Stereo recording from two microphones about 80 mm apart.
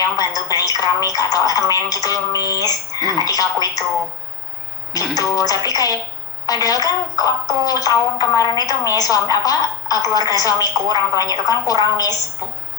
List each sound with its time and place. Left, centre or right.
0.2 s a woman's voice: left
3.0 s speech: right
3.2 s a woman's voice: left
4.9 s a woman's voice: left